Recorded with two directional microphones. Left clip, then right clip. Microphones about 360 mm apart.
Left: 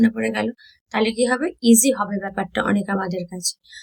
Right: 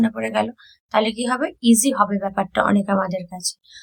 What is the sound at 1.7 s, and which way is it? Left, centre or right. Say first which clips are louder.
Speech: even; right.